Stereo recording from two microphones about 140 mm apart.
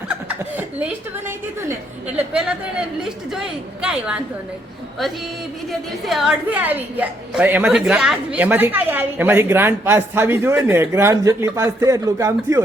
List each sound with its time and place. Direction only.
0.1 s chuckle: 10° right (ahead or behind)
2.1 s a woman's voice: 5° right (ahead or behind)
6.1 s a woman's voice: centre (ahead or behind)
6.5 s a woman's voice: 10° right (ahead or behind)